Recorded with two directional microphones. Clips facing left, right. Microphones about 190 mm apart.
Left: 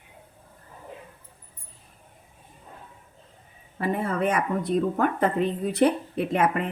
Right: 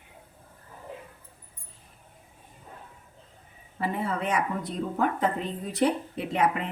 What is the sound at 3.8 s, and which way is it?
Speech, 50° left (ahead or behind).